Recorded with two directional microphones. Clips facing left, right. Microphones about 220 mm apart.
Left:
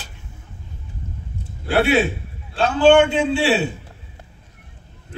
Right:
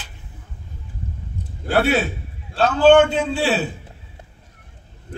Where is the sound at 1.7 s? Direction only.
40° right (ahead or behind).